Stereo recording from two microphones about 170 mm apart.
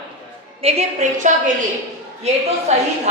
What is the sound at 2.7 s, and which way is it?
Speech, 40° right (ahead or behind).